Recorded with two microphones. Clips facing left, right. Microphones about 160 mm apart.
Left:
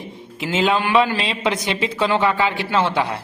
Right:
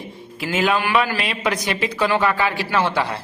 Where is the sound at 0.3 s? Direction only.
25° left (ahead or behind).